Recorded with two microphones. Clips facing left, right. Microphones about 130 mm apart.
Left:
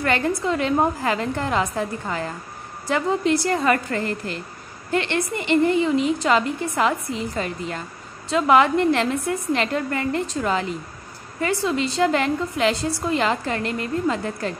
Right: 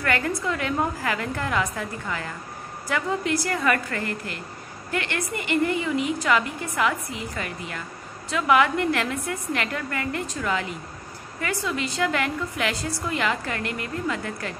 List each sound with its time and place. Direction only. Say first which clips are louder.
0.0 s a woman's voice: left 4 dB; 25° left (ahead or behind)